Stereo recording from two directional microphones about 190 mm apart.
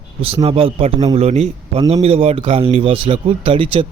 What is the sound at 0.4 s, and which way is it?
A man's voice, 30° right (ahead or behind).